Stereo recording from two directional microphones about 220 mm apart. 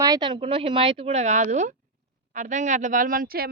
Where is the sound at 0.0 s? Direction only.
20° right (ahead or behind).